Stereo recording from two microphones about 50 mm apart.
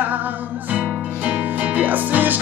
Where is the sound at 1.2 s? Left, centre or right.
Right.